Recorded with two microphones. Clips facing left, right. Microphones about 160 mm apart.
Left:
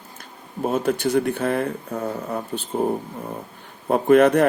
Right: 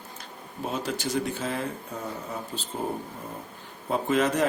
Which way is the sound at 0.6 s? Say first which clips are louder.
Left 9 dB; 55° left (ahead or behind).